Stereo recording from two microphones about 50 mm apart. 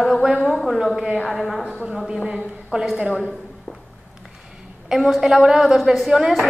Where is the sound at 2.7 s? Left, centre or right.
Right.